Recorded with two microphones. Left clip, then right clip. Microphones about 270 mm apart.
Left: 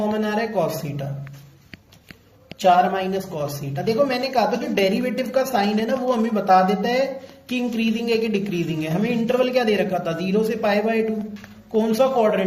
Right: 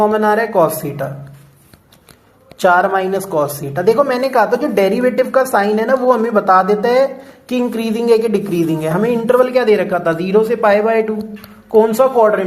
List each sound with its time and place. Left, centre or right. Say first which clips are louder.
0.0 s speech: right 10 dB; right
2.6 s speech: right 5 dB; right